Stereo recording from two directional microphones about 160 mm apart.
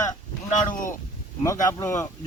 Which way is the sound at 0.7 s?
55° left (ahead or behind).